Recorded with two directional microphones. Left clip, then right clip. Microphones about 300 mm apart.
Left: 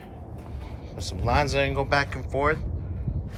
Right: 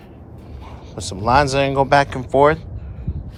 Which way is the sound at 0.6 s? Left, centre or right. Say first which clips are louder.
Right 7 dB; centre.